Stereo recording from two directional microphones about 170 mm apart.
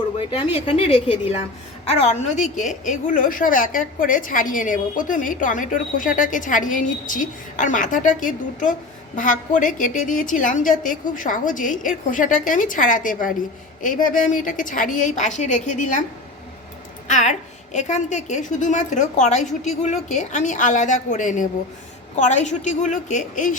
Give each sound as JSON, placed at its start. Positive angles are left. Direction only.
{"t": 0.2, "sound": "a woman's voice", "side_deg": 30}
{"t": 17.1, "sound": "a woman's voice", "side_deg": 45}